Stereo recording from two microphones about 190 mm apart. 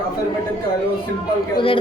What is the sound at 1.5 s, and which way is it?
Speech, 30° left (ahead or behind).